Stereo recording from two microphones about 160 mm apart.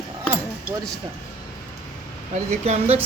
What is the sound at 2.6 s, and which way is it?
Speech, 40° right (ahead or behind).